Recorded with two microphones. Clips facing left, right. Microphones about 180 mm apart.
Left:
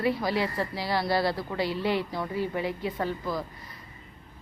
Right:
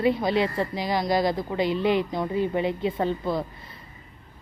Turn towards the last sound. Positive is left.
turn(degrees=-25)  # may be behind; listen again after turning